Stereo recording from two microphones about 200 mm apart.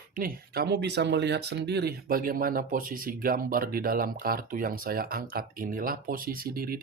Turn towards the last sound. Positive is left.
turn(degrees=-45)  # may be behind; listen again after turning